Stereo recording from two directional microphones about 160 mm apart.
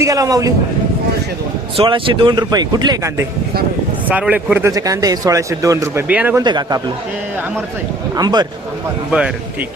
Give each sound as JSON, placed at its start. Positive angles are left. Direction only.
{"t": 0.0, "sound": "speech", "side_deg": -20}
{"t": 1.7, "sound": "speech", "side_deg": -35}
{"t": 4.1, "sound": "speech", "side_deg": -10}
{"t": 4.7, "sound": "speech", "side_deg": -20}
{"t": 6.4, "sound": "speech", "side_deg": -25}
{"t": 8.1, "sound": "speech", "side_deg": -25}